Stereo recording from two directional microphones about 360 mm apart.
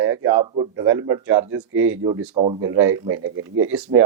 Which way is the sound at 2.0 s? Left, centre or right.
Centre.